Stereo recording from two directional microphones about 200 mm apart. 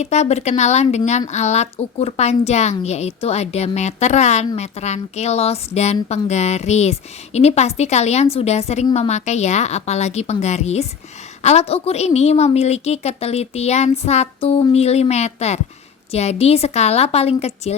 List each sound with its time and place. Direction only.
0.0 s a woman's voice: 35° left (ahead or behind)